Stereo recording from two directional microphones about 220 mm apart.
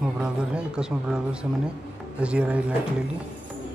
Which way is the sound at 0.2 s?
5° right (ahead or behind).